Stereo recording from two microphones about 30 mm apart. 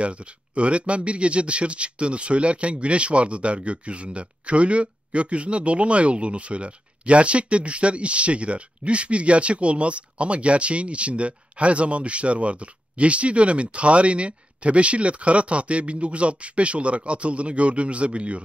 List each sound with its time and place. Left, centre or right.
0.0 s speech: right